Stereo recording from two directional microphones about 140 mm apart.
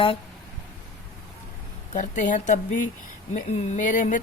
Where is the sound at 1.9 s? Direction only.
65° left (ahead or behind).